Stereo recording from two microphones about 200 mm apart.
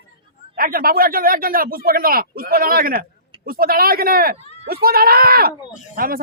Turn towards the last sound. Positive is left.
turn(degrees=-45)  # may be behind; listen again after turning